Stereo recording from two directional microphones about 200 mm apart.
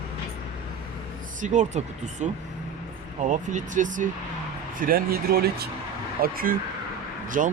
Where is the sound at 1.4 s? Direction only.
35° right (ahead or behind).